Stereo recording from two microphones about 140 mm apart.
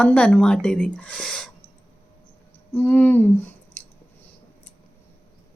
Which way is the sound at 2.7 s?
10° left (ahead or behind).